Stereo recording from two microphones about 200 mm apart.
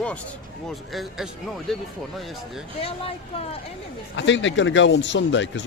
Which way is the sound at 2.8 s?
30° left (ahead or behind).